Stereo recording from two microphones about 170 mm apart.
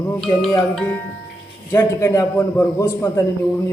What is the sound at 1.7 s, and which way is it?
A man's voice, 15° left (ahead or behind).